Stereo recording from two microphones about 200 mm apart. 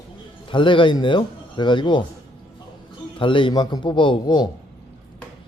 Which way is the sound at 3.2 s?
25° left (ahead or behind).